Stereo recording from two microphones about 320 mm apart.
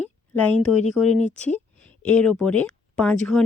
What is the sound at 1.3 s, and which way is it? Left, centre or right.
Speech, centre.